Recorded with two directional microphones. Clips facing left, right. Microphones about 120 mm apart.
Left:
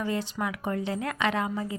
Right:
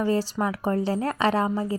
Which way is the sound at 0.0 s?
35° right (ahead or behind).